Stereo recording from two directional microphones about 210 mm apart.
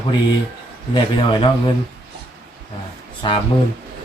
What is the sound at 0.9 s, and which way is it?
Speech, 25° left (ahead or behind).